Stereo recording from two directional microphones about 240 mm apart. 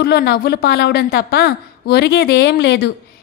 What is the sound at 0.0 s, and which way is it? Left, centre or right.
A woman's voice, left.